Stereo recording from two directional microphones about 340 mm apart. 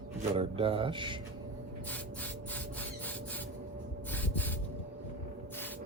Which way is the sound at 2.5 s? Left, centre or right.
Centre.